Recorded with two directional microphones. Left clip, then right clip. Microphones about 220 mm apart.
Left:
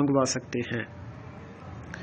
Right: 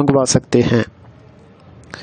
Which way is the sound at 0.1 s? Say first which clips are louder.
Right 12 dB; 60° right (ahead or behind).